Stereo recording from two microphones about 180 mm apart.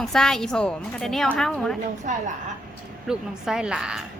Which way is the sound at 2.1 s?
40° right (ahead or behind).